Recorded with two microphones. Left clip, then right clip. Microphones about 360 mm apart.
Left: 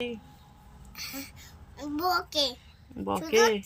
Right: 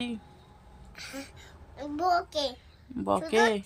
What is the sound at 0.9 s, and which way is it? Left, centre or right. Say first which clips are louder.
A child's voice: left 2 dB; centre.